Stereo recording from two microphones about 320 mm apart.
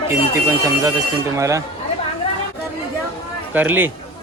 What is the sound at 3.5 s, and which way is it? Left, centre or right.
Speech, centre.